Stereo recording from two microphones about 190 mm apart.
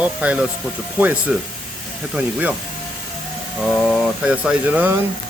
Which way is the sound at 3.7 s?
Centre (ahead or behind).